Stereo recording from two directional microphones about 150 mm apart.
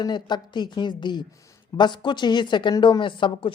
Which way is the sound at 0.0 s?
30° left (ahead or behind).